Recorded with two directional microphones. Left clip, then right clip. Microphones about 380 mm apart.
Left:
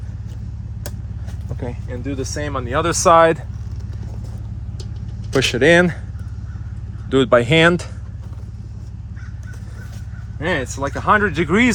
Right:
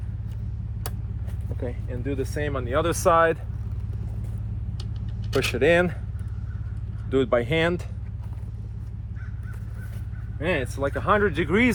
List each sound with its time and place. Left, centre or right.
1.6 s speech: left
5.4 s speech: left
7.1 s speech: left
10.4 s speech: left